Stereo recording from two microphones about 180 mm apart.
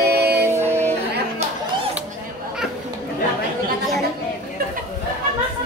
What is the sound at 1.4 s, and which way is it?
Music, 35° right (ahead or behind).